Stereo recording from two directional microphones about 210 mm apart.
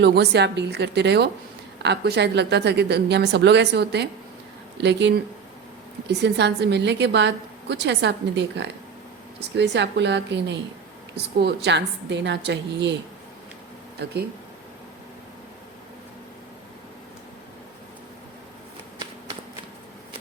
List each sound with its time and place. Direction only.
0.0 s a woman's voice: 55° right (ahead or behind)